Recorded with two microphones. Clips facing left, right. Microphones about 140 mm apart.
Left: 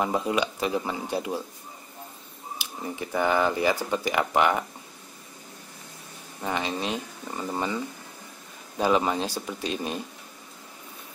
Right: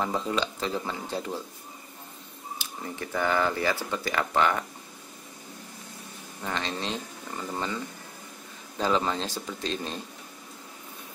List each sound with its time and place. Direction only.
0.0 s speech: 15° left (ahead or behind)
2.6 s speech: 15° left (ahead or behind)
6.4 s speech: 15° left (ahead or behind)